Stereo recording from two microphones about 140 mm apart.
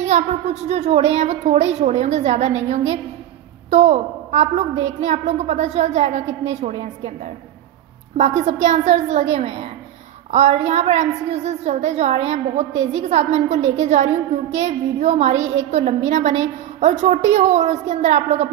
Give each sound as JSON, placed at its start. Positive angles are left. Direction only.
{"t": 0.7, "sound": "a woman's voice", "side_deg": -50}
{"t": 8.2, "sound": "a woman's voice", "side_deg": -55}